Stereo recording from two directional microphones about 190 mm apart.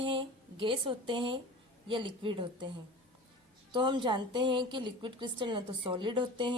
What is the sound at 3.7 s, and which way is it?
A woman's voice, 25° right (ahead or behind).